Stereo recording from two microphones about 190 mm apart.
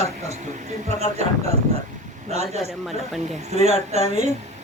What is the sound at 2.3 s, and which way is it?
Speech, 35° right (ahead or behind).